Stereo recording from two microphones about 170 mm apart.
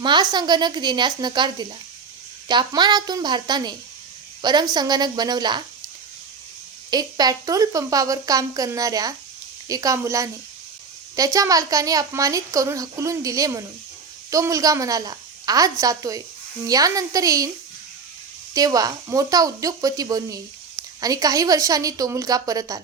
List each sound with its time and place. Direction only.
0.0 s speech: 25° right (ahead or behind)
6.9 s speech: 25° right (ahead or behind)
18.5 s speech: 20° right (ahead or behind)